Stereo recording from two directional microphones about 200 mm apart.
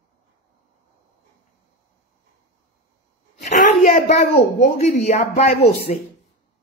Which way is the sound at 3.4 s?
40° left (ahead or behind).